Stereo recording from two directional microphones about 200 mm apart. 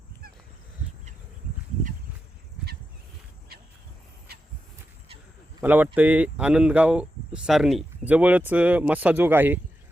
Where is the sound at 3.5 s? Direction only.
50° right (ahead or behind).